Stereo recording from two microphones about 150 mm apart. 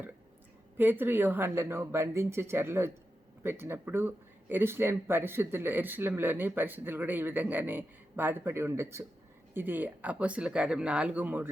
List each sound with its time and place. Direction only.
0.8 s speech: 15° right (ahead or behind)